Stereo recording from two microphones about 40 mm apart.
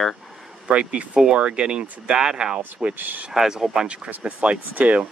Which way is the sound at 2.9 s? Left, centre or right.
Right.